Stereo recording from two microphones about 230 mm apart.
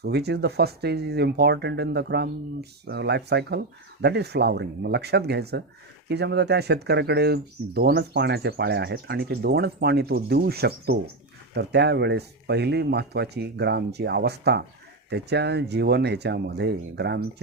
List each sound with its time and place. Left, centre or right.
0.0 s speech: right